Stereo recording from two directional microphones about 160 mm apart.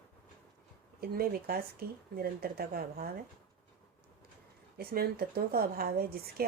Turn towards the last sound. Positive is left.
turn(degrees=-70)  # may be behind; listen again after turning